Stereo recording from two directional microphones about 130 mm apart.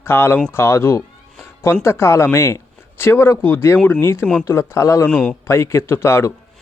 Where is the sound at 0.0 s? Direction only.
20° left (ahead or behind).